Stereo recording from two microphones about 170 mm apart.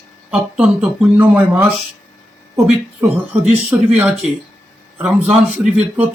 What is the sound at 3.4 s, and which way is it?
A man's voice, 5° right (ahead or behind).